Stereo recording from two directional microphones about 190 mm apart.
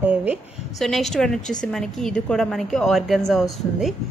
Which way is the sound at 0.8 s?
Centre (ahead or behind).